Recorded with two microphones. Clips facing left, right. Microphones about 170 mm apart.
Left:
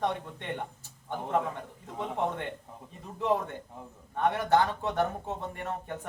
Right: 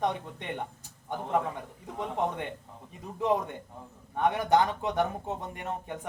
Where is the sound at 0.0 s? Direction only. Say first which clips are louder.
Right 1 dB; 15° right (ahead or behind).